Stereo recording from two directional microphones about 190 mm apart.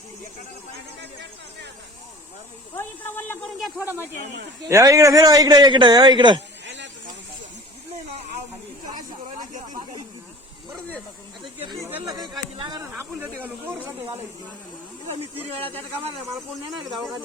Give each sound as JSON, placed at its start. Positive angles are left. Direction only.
{"t": 2.7, "sound": "speech", "side_deg": 10}
{"t": 3.8, "sound": "a man's voice", "side_deg": -10}
{"t": 6.7, "sound": "hiss", "side_deg": -65}
{"t": 11.4, "sound": "a man's voice", "side_deg": -20}
{"t": 12.9, "sound": "speech", "side_deg": -10}
{"t": 15.4, "sound": "speech", "side_deg": -30}
{"t": 16.2, "sound": "speech", "side_deg": -20}